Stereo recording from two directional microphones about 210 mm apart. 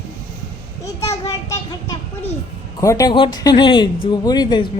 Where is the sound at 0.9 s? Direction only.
15° left (ahead or behind).